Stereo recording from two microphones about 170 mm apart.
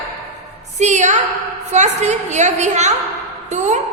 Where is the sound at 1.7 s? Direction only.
40° right (ahead or behind).